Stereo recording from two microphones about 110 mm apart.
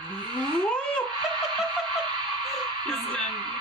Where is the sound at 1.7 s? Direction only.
45° right (ahead or behind).